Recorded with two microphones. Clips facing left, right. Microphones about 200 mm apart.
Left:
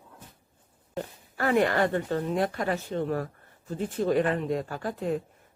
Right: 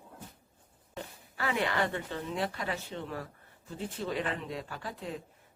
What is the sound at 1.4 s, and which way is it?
Speech, 50° left (ahead or behind).